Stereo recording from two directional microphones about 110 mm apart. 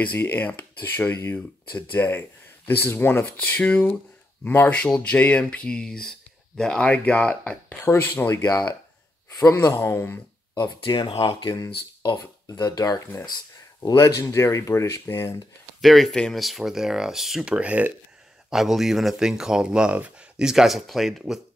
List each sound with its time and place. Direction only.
0.0 s speech: 15° left (ahead or behind)
10.6 s speech: 45° left (ahead or behind)
11.4 s speech: 30° left (ahead or behind)
15.8 s speech: centre (ahead or behind)